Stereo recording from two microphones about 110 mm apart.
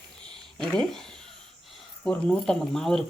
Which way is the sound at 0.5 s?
5° left (ahead or behind).